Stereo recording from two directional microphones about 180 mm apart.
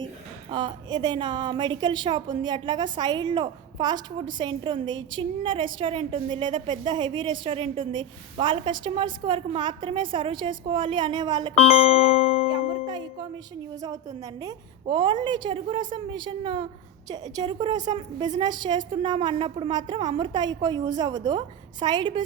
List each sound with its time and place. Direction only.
0.5 s a woman's voice: 25° right (ahead or behind)
13.8 s a woman's voice: 20° right (ahead or behind)